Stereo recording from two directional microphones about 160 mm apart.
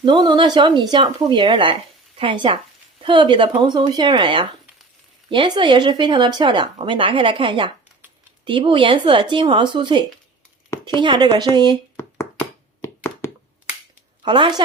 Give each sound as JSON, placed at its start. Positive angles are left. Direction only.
{"t": 0.0, "sound": "a woman's voice", "side_deg": -30}
{"t": 11.9, "sound": "a sound", "side_deg": 15}
{"t": 14.2, "sound": "a woman's voice", "side_deg": -30}